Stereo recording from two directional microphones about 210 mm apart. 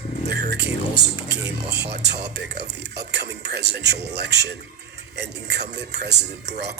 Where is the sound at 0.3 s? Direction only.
50° right (ahead or behind).